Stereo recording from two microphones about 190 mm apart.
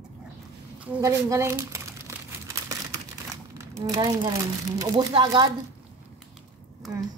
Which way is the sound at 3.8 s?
20° right (ahead or behind).